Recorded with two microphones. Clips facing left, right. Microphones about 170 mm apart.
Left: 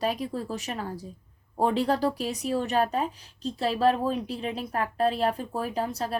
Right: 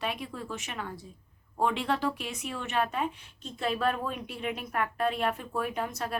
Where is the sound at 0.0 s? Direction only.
35° left (ahead or behind).